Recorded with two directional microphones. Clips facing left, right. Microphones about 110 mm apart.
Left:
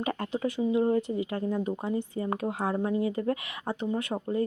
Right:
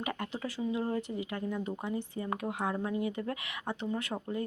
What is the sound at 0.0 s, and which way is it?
Speech, 30° left (ahead or behind).